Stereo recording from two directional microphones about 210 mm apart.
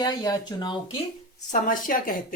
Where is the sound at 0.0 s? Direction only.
20° left (ahead or behind).